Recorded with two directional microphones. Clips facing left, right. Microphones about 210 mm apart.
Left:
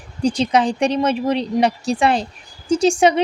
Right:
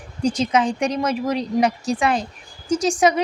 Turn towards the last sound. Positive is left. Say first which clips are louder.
# left 3 dB
turn(degrees=30)  # may be behind; listen again after turning